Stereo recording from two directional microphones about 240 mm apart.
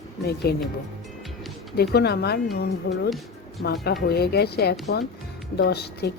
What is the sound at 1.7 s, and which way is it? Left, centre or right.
Speech, left.